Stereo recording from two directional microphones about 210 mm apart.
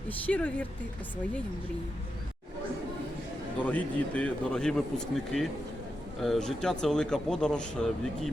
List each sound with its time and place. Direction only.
0.1 s speech: 5° left (ahead or behind)
3.6 s speech: 5° left (ahead or behind)